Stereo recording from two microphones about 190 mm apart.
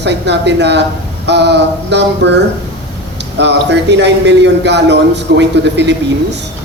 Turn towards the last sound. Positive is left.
turn(degrees=-65)  # may be behind; listen again after turning